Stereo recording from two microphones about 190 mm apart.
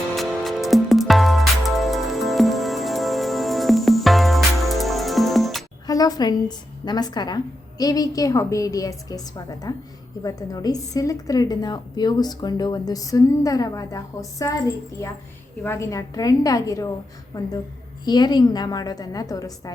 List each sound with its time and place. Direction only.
0.1 s music: centre (ahead or behind)
5.8 s a sound: 20° left (ahead or behind)
6.8 s a woman's voice: 20° left (ahead or behind)